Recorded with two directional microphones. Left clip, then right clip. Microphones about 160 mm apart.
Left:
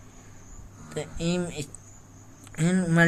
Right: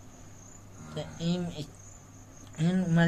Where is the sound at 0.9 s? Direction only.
40° left (ahead or behind).